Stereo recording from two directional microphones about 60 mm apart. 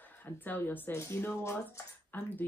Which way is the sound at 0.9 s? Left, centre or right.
Left.